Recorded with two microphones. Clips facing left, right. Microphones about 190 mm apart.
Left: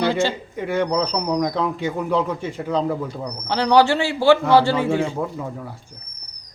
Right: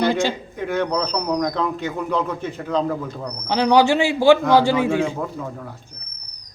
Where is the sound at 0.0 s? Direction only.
15° right (ahead or behind).